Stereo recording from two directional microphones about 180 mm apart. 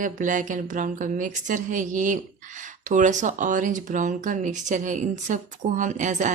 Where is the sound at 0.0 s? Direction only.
45° right (ahead or behind).